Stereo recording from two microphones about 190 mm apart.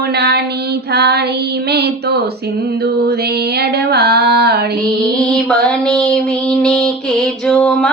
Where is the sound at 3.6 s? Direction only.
55° right (ahead or behind).